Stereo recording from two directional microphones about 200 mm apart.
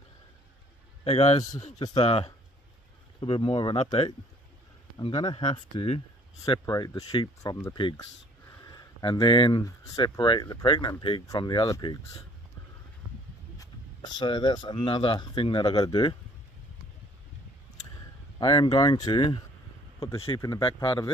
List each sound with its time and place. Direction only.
1.0 s a man's voice: 30° left (ahead or behind)
13.6 s speech: 20° left (ahead or behind)
18.4 s speech: 20° left (ahead or behind)